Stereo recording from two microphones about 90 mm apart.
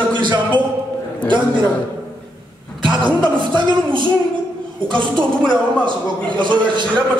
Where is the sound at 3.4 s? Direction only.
65° right (ahead or behind).